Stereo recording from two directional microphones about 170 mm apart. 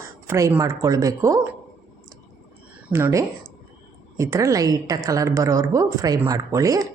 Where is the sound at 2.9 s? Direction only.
15° right (ahead or behind).